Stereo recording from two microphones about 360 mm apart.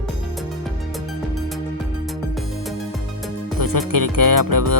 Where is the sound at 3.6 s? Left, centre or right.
Right.